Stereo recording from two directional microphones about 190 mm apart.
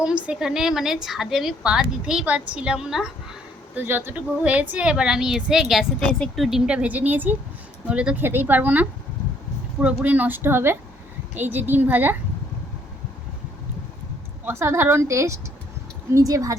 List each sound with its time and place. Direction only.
0.3 s a woman's voice: 5° right (ahead or behind)
14.4 s a woman's voice: 15° right (ahead or behind)